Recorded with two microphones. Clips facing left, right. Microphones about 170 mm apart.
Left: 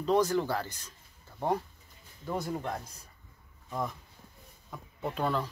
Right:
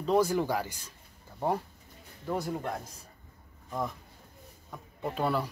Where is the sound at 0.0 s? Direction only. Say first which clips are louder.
Right 1 dB; 5° right (ahead or behind).